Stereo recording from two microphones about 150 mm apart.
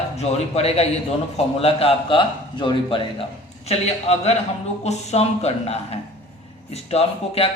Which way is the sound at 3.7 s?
45° left (ahead or behind).